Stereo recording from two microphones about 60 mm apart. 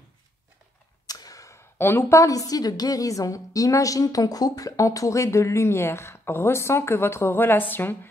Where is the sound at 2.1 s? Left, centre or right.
Left.